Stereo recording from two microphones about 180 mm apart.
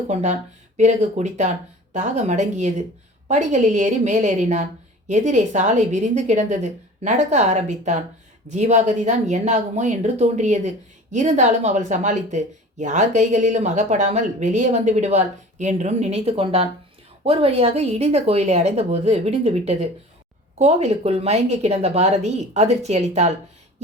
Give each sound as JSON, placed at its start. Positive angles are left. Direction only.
{"t": 0.1, "sound": "speech", "side_deg": -40}